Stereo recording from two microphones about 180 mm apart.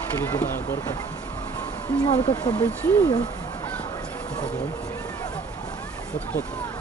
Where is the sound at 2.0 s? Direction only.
35° left (ahead or behind).